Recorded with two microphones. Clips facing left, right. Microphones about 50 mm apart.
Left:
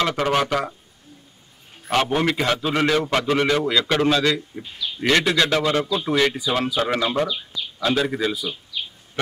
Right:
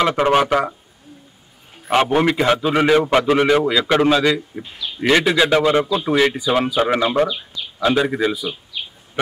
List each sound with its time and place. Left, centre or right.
0.0 s a man's voice: centre
2.0 s a man's voice: centre